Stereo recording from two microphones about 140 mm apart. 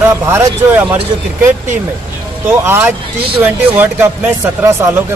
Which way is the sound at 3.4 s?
15° right (ahead or behind).